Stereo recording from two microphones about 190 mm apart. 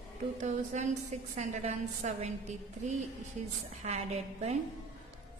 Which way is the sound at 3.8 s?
35° right (ahead or behind).